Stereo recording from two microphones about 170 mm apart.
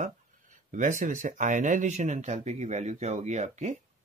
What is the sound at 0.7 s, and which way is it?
Speech, 50° right (ahead or behind).